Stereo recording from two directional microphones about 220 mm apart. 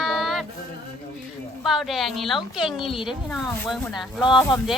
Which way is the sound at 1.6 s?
Centre (ahead or behind).